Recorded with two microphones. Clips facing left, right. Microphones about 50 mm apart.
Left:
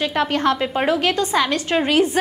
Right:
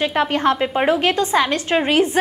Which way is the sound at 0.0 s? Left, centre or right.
Centre.